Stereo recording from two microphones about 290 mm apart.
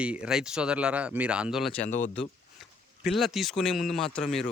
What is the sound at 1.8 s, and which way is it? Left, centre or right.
Speech, left.